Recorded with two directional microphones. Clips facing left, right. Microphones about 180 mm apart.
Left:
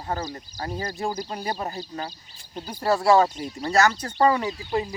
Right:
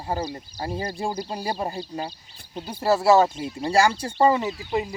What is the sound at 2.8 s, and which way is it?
Speech, 5° right (ahead or behind).